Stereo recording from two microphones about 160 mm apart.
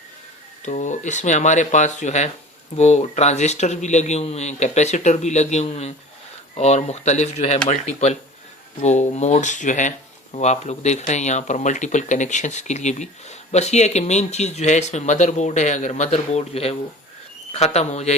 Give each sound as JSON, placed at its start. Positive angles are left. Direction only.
{"t": 0.6, "sound": "speech", "side_deg": 50}